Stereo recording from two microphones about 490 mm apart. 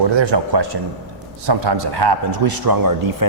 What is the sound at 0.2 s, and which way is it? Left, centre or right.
A man's voice, right.